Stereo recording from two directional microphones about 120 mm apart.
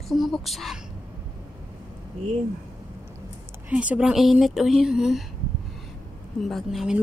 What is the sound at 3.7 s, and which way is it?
Speech, 10° right (ahead or behind).